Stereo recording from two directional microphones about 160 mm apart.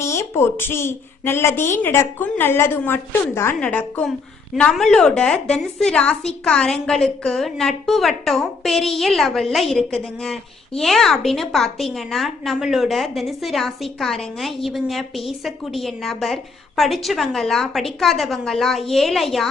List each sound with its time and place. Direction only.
0.0 s a woman's voice: 15° left (ahead or behind); by 19.5 s centre (ahead or behind)